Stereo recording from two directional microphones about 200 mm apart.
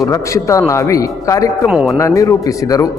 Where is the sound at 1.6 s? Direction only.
Centre (ahead or behind).